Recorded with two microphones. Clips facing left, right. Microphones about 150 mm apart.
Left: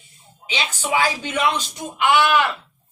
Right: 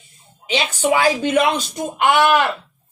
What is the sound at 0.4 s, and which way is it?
Speech, 50° right (ahead or behind).